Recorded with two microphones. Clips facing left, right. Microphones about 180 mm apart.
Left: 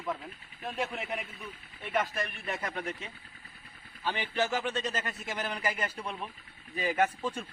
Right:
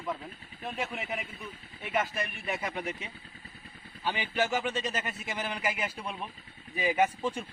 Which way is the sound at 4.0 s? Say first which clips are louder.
Right 1 dB; 10° right (ahead or behind).